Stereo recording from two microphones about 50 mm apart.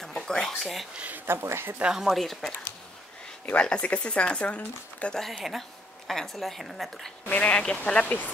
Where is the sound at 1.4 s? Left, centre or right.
Right.